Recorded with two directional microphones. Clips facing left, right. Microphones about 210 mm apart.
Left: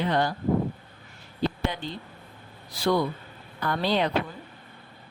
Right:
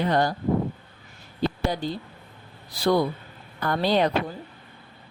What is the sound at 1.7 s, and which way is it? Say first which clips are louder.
Speech: right 6 dB; 40° right (ahead or behind).